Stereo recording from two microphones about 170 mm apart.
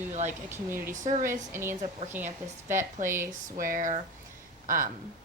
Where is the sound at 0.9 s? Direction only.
45° right (ahead or behind).